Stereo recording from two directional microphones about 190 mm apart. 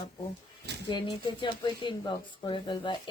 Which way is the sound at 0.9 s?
25° left (ahead or behind).